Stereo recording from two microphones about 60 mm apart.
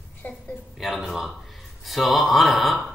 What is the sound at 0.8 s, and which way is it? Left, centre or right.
Speech, centre.